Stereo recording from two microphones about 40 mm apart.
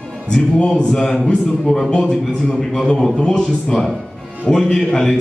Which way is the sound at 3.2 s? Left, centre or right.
Left.